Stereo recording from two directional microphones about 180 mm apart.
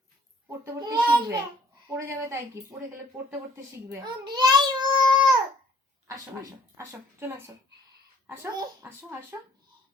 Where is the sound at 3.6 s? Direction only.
20° right (ahead or behind).